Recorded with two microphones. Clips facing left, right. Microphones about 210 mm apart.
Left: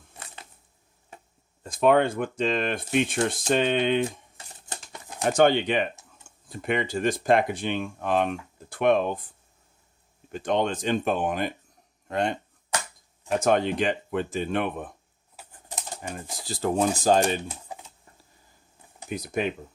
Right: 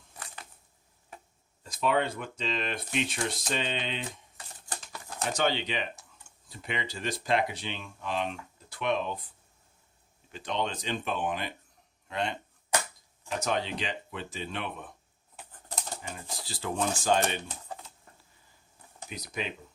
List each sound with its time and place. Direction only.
1.6 s speech: 50° left (ahead or behind)
4.4 s crumpling: 25° left (ahead or behind)
5.2 s speech: 50° left (ahead or behind)
10.3 s speech: 50° left (ahead or behind)
16.5 s speech: 45° left (ahead or behind)
17.5 s typing: 10° left (ahead or behind)
19.0 s speech: 50° left (ahead or behind)